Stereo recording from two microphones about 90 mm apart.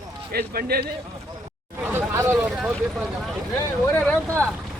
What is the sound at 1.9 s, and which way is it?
Hubbub, 25° right (ahead or behind).